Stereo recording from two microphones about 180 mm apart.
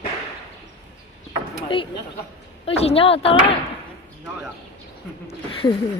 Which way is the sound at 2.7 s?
35° left (ahead or behind).